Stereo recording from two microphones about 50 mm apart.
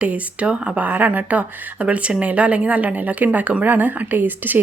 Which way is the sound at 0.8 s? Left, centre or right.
Right.